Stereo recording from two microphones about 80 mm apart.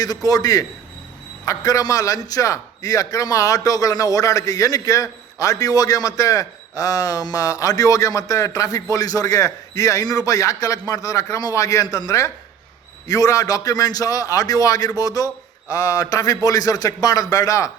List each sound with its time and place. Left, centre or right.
0.0 s a man's voice: left